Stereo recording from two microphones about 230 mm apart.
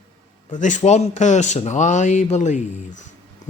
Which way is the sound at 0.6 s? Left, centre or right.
Left.